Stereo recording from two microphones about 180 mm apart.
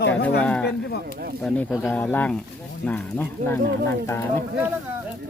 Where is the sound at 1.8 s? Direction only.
10° left (ahead or behind).